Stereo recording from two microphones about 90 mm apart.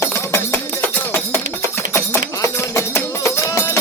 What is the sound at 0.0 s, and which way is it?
Music, 30° left (ahead or behind).